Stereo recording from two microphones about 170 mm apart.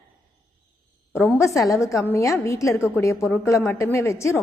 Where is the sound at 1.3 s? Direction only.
15° left (ahead or behind).